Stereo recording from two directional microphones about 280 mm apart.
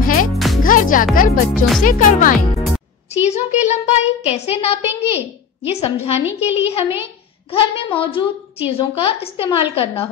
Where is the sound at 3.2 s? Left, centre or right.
Left.